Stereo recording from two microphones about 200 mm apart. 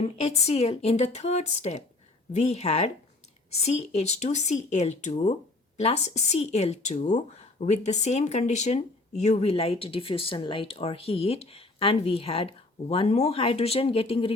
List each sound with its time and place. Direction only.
0.0 s speech: 30° left (ahead or behind)